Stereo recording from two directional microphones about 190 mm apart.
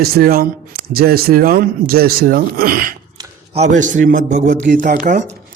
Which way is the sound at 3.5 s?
40° right (ahead or behind).